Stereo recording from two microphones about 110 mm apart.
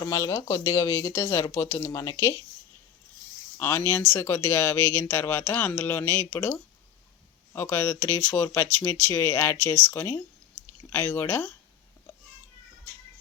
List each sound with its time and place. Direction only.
0.0 s speech: 30° left (ahead or behind)
3.6 s speech: 20° left (ahead or behind)
7.5 s speech: 20° left (ahead or behind)